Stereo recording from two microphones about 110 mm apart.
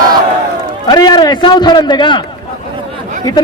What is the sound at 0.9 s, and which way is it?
A man's voice, 40° left (ahead or behind).